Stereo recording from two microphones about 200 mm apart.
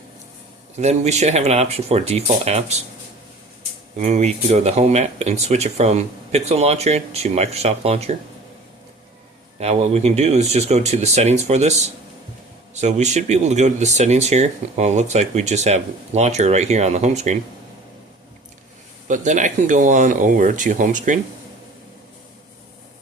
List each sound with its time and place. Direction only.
0.8 s speech: 35° right (ahead or behind)
3.9 s speech: 35° right (ahead or behind)
9.6 s speech: 30° right (ahead or behind)
19.0 s speech: 40° right (ahead or behind)